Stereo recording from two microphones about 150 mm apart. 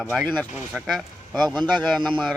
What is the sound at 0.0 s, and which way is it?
Speech, centre (ahead or behind).